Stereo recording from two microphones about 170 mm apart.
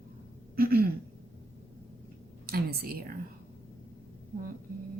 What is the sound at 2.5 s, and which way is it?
Speech, 65° right (ahead or behind).